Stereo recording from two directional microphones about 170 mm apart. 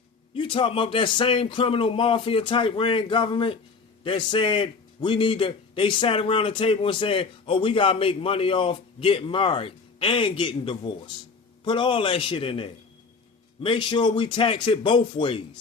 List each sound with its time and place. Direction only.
0.3 s a man's voice: 30° left (ahead or behind)